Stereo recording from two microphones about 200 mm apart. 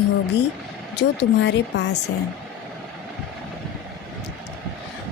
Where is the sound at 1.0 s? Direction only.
60° left (ahead or behind).